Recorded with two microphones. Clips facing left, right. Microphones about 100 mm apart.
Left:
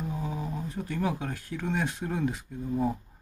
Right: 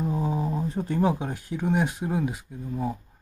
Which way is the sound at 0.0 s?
30° right (ahead or behind).